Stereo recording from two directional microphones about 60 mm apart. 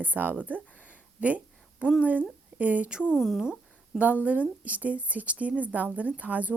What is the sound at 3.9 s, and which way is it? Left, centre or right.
A woman's voice, right.